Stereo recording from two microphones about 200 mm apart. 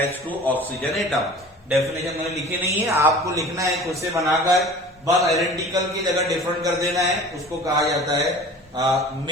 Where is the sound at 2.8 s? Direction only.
15° right (ahead or behind).